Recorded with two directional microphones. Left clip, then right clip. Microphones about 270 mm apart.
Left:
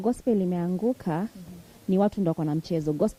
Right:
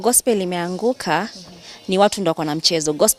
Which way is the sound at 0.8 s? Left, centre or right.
Right.